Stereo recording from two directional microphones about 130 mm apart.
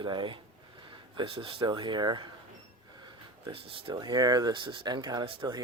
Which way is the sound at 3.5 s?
45° right (ahead or behind).